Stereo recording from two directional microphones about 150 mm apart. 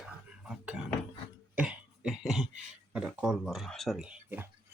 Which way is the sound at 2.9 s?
5° right (ahead or behind).